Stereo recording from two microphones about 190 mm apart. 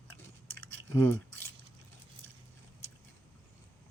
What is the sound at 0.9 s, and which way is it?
Speech, 15° left (ahead or behind).